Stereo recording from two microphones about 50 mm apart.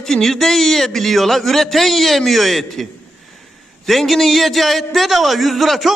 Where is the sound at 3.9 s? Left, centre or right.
Centre.